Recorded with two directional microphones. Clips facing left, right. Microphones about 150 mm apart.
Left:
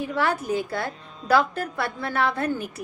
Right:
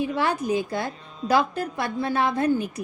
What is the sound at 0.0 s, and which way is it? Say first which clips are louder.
A woman's voice: right 1 dB; 20° right (ahead or behind).